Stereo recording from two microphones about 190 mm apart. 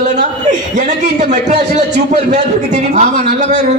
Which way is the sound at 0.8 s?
40° right (ahead or behind).